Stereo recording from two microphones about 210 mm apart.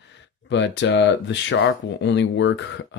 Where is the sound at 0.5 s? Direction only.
60° left (ahead or behind).